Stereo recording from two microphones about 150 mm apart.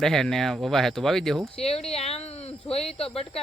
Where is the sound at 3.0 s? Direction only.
40° left (ahead or behind).